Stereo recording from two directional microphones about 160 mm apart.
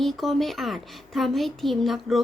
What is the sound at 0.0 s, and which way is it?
Speech, centre (ahead or behind).